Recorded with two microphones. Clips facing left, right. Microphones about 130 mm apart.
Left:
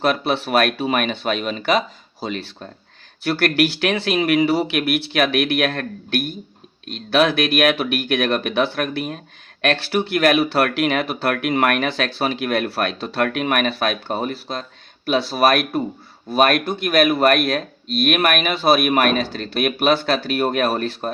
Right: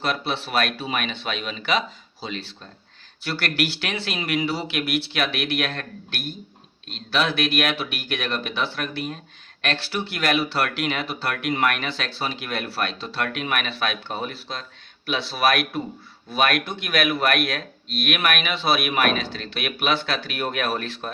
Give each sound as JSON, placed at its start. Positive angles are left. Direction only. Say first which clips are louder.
{"t": 0.0, "sound": "speech", "louder": "left 7 dB", "side_deg": 55}